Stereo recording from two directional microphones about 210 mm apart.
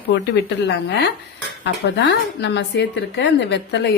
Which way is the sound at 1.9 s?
55° left (ahead or behind).